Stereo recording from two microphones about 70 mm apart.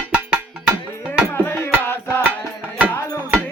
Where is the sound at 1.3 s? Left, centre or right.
Left.